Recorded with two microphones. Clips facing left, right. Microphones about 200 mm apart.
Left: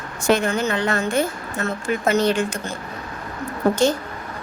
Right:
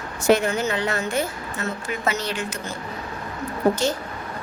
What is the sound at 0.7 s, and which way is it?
A woman's voice, 50° left (ahead or behind).